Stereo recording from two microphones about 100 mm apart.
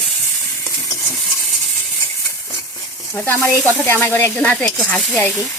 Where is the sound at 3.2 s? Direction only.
20° left (ahead or behind).